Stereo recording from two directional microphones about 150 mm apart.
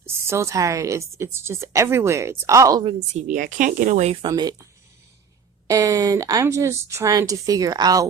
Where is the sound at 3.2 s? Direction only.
55° right (ahead or behind).